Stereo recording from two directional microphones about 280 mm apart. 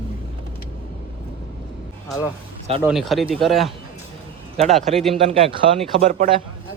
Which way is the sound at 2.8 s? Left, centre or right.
Centre.